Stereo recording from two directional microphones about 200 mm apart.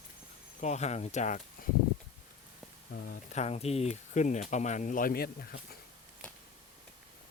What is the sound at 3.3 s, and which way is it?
Speech, 30° left (ahead or behind).